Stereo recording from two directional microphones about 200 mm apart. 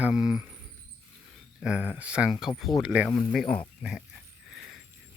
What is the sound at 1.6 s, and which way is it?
Speech, 5° right (ahead or behind).